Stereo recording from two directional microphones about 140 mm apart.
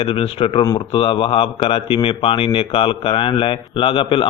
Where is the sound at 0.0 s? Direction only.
40° left (ahead or behind).